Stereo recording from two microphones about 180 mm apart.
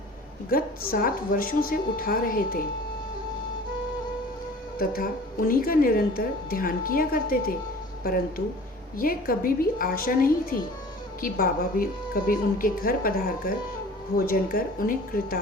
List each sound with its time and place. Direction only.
0.5 s a woman's voice: 55° left (ahead or behind)
4.8 s a woman's voice: 50° left (ahead or behind)